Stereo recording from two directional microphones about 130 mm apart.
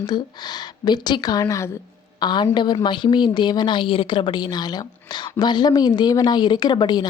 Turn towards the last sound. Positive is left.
turn(degrees=35)  # may be behind; listen again after turning